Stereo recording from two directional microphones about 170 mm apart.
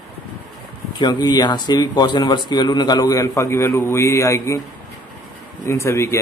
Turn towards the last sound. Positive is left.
turn(degrees=15)  # may be behind; listen again after turning